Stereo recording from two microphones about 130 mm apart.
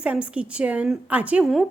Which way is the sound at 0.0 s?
10° right (ahead or behind).